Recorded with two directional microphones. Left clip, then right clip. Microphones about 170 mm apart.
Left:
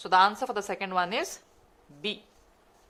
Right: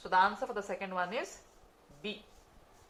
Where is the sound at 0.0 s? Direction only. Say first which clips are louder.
Left 6 dB; 65° left (ahead or behind).